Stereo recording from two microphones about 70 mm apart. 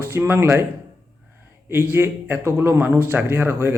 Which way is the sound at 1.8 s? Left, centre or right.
Right.